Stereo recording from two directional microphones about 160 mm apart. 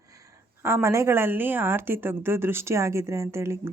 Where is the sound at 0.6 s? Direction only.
15° right (ahead or behind).